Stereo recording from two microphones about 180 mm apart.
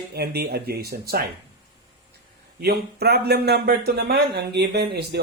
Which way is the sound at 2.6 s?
60° right (ahead or behind).